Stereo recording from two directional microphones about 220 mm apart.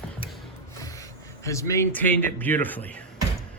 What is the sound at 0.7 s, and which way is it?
Speech, 15° left (ahead or behind).